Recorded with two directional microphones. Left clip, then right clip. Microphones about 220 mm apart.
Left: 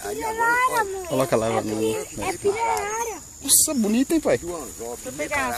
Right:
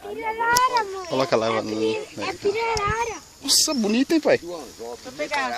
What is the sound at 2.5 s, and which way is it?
Speech, 20° left (ahead or behind).